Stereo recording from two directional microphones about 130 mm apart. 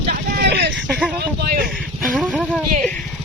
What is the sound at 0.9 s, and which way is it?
Speech, 5° right (ahead or behind).